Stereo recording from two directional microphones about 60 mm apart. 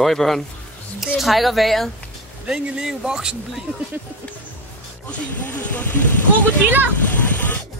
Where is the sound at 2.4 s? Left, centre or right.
Centre.